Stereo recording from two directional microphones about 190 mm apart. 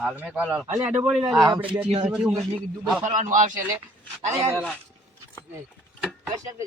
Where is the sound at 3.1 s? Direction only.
40° right (ahead or behind).